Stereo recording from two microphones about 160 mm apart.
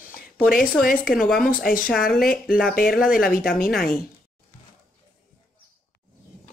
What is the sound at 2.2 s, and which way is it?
Speech, 65° left (ahead or behind).